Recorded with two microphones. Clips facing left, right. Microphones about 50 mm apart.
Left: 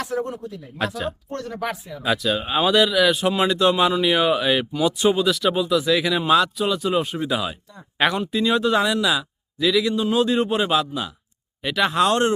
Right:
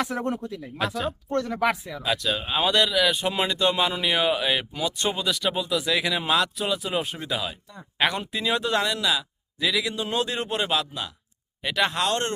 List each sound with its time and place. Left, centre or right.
0.1 s speech: right
1.3 s speech: right
2.0 s speech: centre